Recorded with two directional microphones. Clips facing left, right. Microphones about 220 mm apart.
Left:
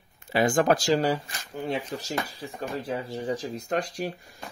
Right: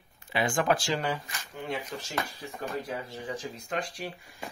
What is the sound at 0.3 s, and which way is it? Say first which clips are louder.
Speech: left 5 dB; 40° left (ahead or behind).